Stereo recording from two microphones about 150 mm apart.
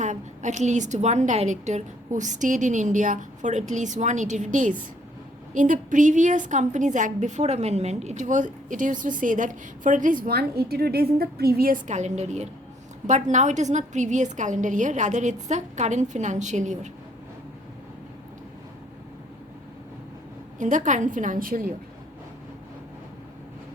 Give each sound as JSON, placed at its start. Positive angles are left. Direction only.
{"t": 0.0, "sound": "a woman's voice", "side_deg": -55}
{"t": 11.9, "sound": "a woman's voice", "side_deg": -50}
{"t": 20.6, "sound": "a woman's voice", "side_deg": -55}